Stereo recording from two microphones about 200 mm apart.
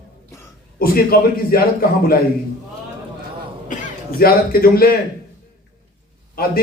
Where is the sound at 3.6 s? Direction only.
45° left (ahead or behind).